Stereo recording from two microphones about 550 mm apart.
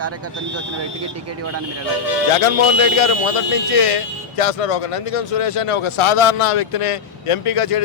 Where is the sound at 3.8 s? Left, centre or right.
Left.